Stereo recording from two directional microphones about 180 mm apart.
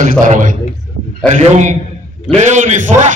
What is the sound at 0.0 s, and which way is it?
A man's voice, 45° right (ahead or behind).